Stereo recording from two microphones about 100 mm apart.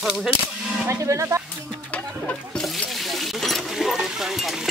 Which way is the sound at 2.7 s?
Centre (ahead or behind).